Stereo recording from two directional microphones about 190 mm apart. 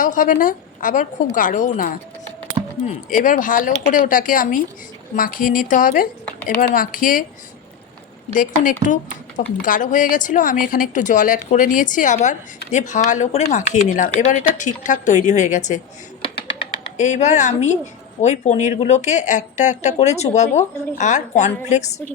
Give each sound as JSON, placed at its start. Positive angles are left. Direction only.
{"t": 0.0, "sound": "a woman's voice", "side_deg": 45}
{"t": 2.8, "sound": "a woman's voice", "side_deg": 45}
{"t": 8.3, "sound": "a woman's voice", "side_deg": 40}
{"t": 17.0, "sound": "speech", "side_deg": 40}